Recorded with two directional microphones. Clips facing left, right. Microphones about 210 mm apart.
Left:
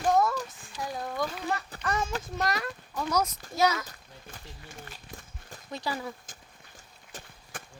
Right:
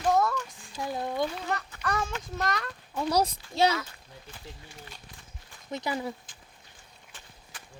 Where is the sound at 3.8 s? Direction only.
45° left (ahead or behind).